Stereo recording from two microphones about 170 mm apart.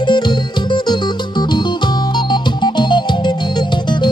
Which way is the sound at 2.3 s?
25° left (ahead or behind).